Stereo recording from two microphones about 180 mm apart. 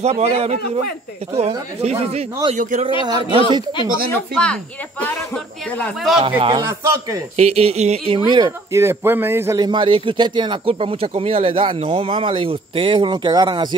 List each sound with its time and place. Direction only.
0.0 s speech: 35° right (ahead or behind)
1.8 s speech: 35° right (ahead or behind)
3.1 s speech: 25° right (ahead or behind)
4.1 s speech: 5° left (ahead or behind)
6.2 s speech: 30° right (ahead or behind)
7.3 s speech: 35° right (ahead or behind)